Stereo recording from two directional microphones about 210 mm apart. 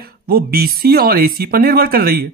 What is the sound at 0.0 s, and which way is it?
Speech, 45° right (ahead or behind).